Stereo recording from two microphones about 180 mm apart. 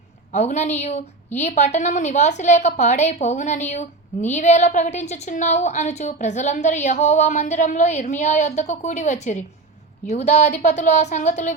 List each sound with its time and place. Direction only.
0.3 s a woman's voice: 40° left (ahead or behind)